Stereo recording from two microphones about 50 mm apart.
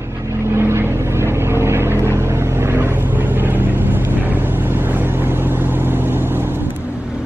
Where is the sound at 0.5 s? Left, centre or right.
Right.